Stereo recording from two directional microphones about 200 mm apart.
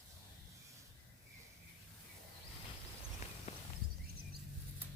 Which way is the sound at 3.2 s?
35° left (ahead or behind).